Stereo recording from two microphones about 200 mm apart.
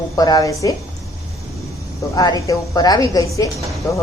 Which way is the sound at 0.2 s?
20° left (ahead or behind).